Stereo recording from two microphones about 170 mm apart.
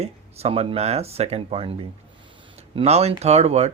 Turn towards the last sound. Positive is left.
turn(degrees=-40)  # may be behind; listen again after turning